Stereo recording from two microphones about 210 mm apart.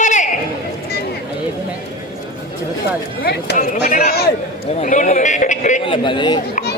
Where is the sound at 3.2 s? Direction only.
50° left (ahead or behind).